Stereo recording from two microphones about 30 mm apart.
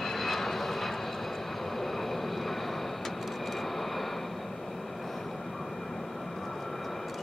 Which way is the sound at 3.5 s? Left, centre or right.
Centre.